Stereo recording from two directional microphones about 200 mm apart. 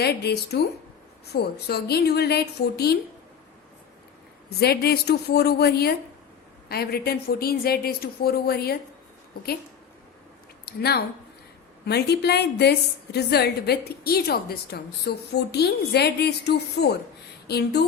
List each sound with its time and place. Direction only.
0.0 s a woman's voice: 55° left (ahead or behind)
4.4 s a woman's voice: 50° left (ahead or behind)
10.7 s a woman's voice: 50° left (ahead or behind)